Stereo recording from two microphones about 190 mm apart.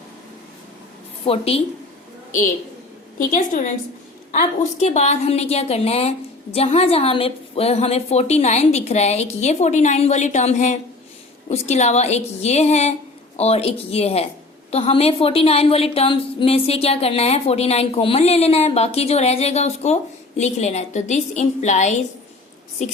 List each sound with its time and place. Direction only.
1.2 s a woman's voice: 30° left (ahead or behind)
3.2 s a woman's voice: 45° left (ahead or behind)
4.8 s a woman's voice: 35° left (ahead or behind)